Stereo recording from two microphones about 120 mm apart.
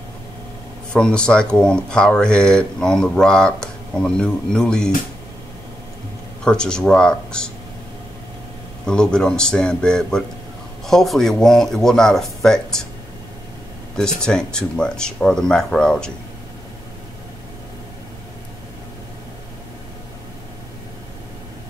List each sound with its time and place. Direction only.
0.9 s speech: 5° left (ahead or behind)
6.4 s speech: 5° left (ahead or behind)
8.8 s speech: 5° left (ahead or behind)
13.9 s speech: 5° left (ahead or behind)